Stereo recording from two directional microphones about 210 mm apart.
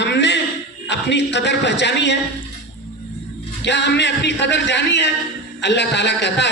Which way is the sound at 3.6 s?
55° left (ahead or behind).